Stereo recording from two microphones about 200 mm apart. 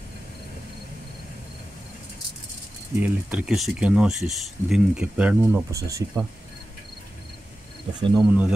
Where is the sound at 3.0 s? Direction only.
5° right (ahead or behind).